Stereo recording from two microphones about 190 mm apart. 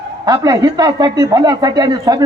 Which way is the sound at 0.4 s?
20° right (ahead or behind).